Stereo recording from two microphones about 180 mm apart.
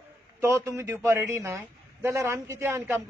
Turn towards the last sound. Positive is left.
turn(degrees=-15)  # may be behind; listen again after turning